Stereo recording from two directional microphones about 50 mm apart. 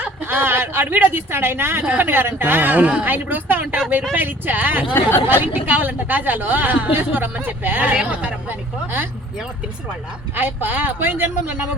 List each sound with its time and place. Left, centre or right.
0.0 s a sound: right
0.9 s a woman's voice: right
4.9 s speech: left
5.4 s a woman's voice: right
7.9 s speech: right
8.4 s a woman's voice: right
10.3 s a woman's voice: right